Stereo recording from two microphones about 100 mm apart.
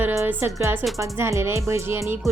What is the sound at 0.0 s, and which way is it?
Music, 30° right (ahead or behind).